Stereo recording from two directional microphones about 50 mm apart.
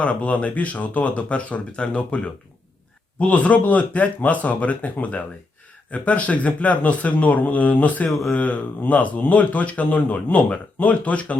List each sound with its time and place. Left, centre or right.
0.0 s speech: left